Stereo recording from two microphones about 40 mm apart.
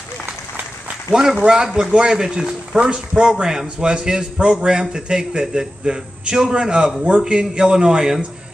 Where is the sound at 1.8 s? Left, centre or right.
Right.